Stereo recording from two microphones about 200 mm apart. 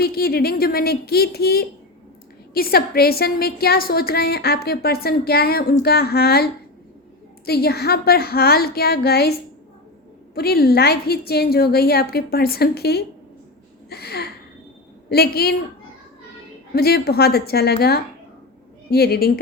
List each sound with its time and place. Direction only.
0.0 s a woman's voice: 50° left (ahead or behind)
10.3 s a woman's voice: 50° left (ahead or behind)
16.7 s a woman's voice: 50° left (ahead or behind)